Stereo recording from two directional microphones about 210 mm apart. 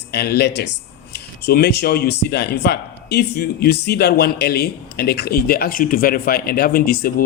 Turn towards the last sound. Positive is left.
turn(degrees=45)  # may be behind; listen again after turning